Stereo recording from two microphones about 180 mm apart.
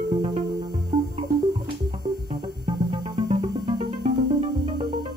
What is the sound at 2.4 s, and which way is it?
Music, 30° right (ahead or behind).